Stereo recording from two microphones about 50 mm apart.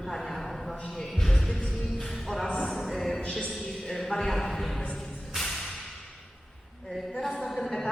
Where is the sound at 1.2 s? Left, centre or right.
Centre.